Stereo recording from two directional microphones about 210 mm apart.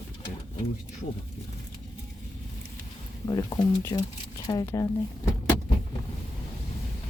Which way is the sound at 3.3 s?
15° left (ahead or behind).